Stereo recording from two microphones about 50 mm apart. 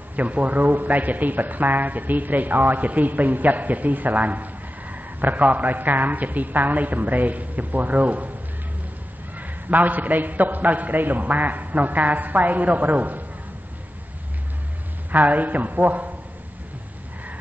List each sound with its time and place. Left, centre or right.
0.1 s a man's voice: right
9.4 s a man's voice: right
15.0 s a man's voice: right